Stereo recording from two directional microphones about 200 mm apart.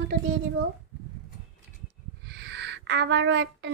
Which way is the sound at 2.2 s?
60° right (ahead or behind).